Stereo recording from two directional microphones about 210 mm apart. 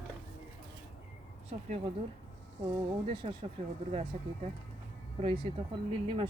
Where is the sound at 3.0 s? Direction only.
25° right (ahead or behind).